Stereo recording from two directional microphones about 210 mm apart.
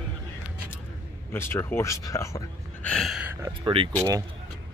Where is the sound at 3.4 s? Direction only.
25° right (ahead or behind).